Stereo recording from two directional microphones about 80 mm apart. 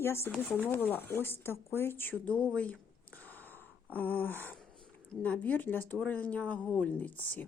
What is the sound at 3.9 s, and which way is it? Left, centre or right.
Speech, left.